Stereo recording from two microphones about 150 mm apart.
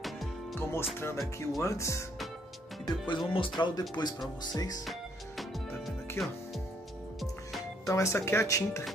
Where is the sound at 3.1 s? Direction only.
35° left (ahead or behind).